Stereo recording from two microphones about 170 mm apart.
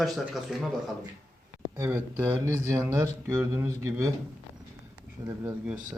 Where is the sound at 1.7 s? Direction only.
15° right (ahead or behind).